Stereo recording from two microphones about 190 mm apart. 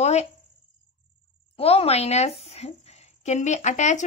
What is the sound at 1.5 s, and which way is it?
A woman's voice, 30° left (ahead or behind).